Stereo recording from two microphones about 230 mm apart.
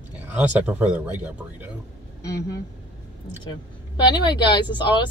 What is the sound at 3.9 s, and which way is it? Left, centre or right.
Speech, centre.